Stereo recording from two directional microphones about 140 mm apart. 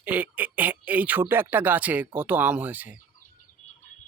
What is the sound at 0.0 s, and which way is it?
Speech, 10° right (ahead or behind).